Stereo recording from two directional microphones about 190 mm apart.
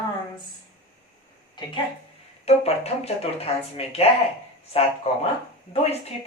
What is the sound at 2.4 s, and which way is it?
Speech, 35° left (ahead or behind).